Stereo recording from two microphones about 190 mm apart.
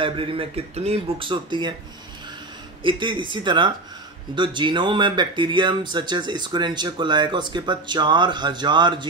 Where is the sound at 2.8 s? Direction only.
25° right (ahead or behind).